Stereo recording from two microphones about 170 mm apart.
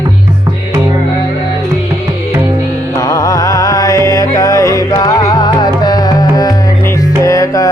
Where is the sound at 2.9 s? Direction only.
20° left (ahead or behind).